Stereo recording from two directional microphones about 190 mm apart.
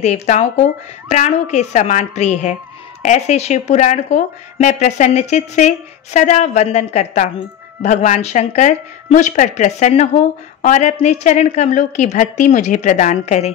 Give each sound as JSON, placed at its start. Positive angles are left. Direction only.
{"t": 0.0, "sound": "speech", "side_deg": 35}